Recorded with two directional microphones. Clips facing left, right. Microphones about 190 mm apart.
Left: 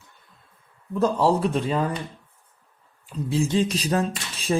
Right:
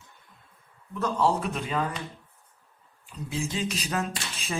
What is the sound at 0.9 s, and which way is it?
Speech, 35° left (ahead or behind).